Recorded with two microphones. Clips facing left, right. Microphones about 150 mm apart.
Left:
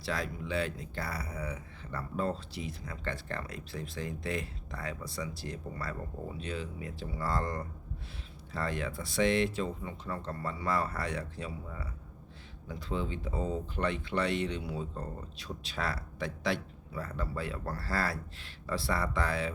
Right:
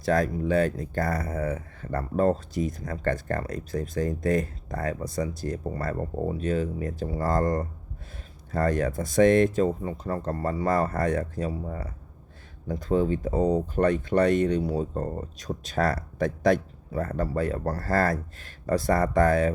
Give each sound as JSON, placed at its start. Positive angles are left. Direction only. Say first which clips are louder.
{"t": 0.0, "sound": "speech", "louder": "right 12 dB", "side_deg": -45}